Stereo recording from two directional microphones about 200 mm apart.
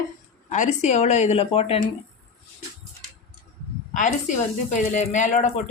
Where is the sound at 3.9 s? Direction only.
40° left (ahead or behind).